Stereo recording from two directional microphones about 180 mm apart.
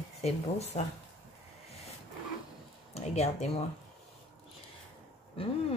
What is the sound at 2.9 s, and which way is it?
Speech, 35° left (ahead or behind).